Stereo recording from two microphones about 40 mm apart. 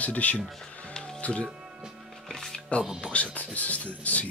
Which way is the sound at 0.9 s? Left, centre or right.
Centre.